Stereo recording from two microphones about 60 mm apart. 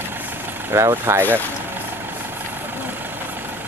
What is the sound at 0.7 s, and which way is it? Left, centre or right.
Speech, right.